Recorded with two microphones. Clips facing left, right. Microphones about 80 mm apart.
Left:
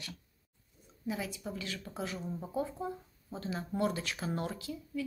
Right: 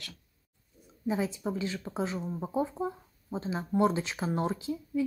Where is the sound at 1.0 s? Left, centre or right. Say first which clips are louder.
Right 7 dB; right.